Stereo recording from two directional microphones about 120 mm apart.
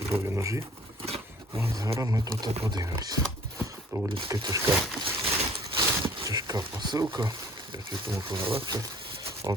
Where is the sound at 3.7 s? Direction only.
25° right (ahead or behind).